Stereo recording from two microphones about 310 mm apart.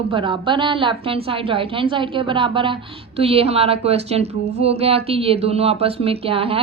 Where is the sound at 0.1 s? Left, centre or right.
Centre.